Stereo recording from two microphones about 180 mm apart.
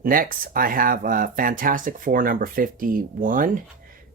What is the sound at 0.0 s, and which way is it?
Speech, 50° right (ahead or behind).